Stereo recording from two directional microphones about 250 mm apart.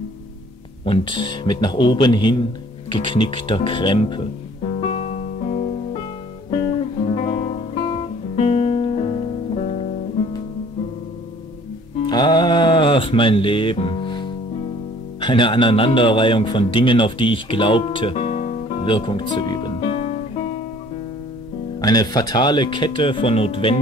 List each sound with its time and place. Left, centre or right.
0.8 s speech: left
4.7 s music: left
7.1 s guitar: left
8.5 s music: left
12.1 s music: centre
15.1 s speech: centre
21.8 s speech: centre